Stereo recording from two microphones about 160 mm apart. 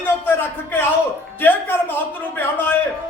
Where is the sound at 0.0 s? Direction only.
15° left (ahead or behind).